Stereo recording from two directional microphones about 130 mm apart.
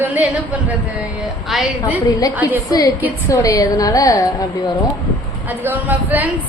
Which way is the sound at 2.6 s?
25° left (ahead or behind).